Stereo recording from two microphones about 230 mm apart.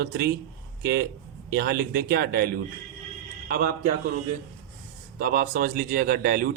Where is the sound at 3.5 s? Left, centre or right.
Right.